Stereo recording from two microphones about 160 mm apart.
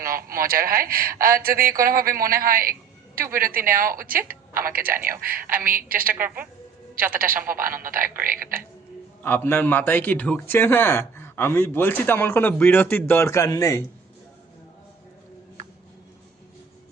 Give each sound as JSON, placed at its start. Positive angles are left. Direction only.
{"t": 0.0, "sound": "speech", "side_deg": -65}
{"t": 6.2, "sound": "a woman's voice", "side_deg": -10}
{"t": 6.9, "sound": "speech", "side_deg": -65}
{"t": 9.2, "sound": "a man's voice", "side_deg": 15}